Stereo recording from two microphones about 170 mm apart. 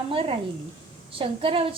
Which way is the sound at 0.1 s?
35° right (ahead or behind).